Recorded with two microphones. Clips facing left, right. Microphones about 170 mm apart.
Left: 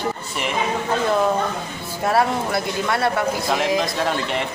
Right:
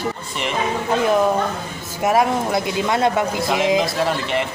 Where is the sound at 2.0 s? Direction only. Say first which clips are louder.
Right 2 dB; 15° right (ahead or behind).